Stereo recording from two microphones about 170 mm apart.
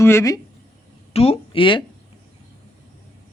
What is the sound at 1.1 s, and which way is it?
Speech, 35° left (ahead or behind).